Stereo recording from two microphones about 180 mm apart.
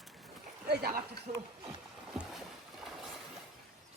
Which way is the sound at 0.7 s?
55° right (ahead or behind).